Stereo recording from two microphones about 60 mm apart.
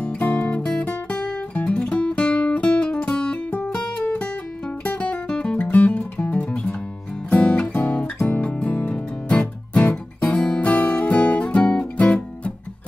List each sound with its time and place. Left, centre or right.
0.0 s music: left
4.8 s music: left
5.6 s music: left